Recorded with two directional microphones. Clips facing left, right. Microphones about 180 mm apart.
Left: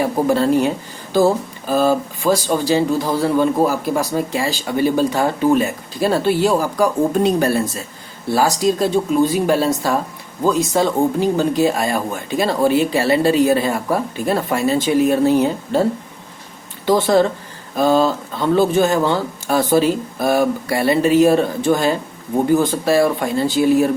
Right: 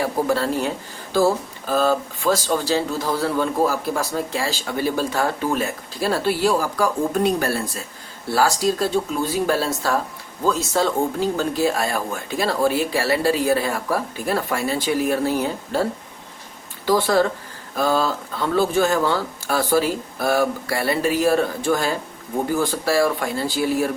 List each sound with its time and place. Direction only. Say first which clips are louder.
0.0 s speech: left 5 dB; 20° left (ahead or behind)